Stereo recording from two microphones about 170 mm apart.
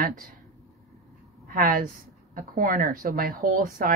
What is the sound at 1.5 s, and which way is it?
A woman's voice, 55° right (ahead or behind).